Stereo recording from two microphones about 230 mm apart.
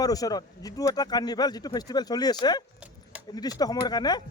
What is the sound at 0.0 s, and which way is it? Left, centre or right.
Speech, centre.